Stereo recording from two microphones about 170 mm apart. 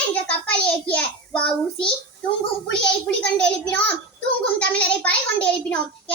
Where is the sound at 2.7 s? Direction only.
5° left (ahead or behind).